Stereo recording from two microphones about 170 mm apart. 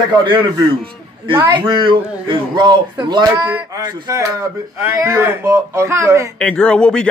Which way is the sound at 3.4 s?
10° right (ahead or behind).